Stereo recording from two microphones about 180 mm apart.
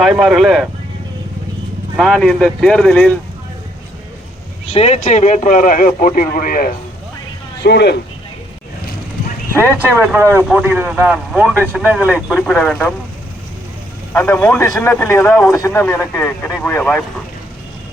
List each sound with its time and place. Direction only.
0.0 s speech: centre (ahead or behind)
2.0 s speech: centre (ahead or behind)
4.6 s speech: 35° left (ahead or behind); by 6.7 s 55° left (ahead or behind)
7.6 s speech: 70° left (ahead or behind)
9.9 s speech: 10° right (ahead or behind)
14.1 s speech: 10° left (ahead or behind)